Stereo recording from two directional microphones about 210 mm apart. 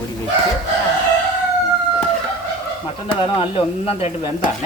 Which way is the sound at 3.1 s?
25° left (ahead or behind).